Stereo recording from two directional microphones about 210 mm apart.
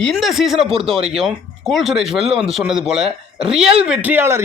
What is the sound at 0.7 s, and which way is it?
Speech, 25° right (ahead or behind).